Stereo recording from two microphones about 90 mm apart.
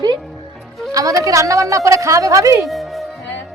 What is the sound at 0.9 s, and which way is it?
Speech, 40° right (ahead or behind).